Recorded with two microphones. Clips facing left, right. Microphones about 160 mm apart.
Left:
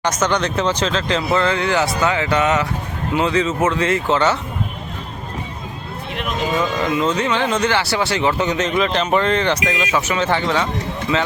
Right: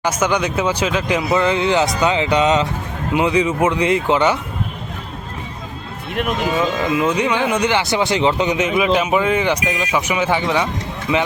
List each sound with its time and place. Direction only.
0.0 s speech: 10° right (ahead or behind)
7.0 s speech: 15° right (ahead or behind)